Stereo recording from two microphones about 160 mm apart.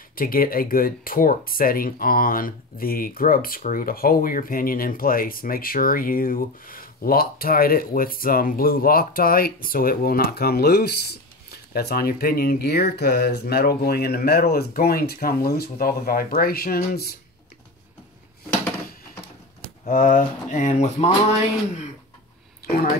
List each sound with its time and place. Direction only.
0.1 s speech: 65° left (ahead or behind)
19.8 s speech: 60° left (ahead or behind)
22.7 s speech: 70° left (ahead or behind)